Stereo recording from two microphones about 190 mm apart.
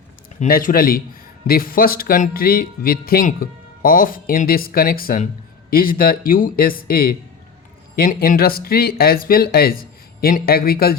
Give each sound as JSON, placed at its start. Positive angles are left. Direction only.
{"t": 0.3, "sound": "speech", "side_deg": 45}